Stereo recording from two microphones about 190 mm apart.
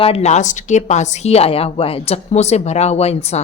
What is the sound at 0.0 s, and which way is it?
A woman's voice, 35° left (ahead or behind).